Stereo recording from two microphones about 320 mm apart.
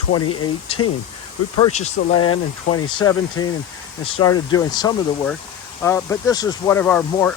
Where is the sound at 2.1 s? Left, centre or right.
Left.